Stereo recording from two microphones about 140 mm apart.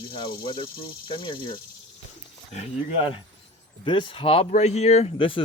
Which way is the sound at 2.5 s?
50° left (ahead or behind).